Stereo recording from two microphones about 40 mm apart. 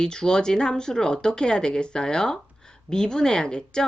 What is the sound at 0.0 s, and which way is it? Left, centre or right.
Speech, centre.